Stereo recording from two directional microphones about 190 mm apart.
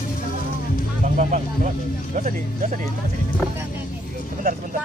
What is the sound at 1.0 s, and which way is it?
Speech, 40° right (ahead or behind).